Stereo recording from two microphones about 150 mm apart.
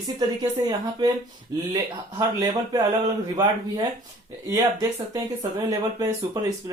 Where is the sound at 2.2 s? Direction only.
25° right (ahead or behind).